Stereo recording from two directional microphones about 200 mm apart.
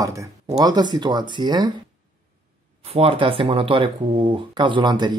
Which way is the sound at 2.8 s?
30° right (ahead or behind).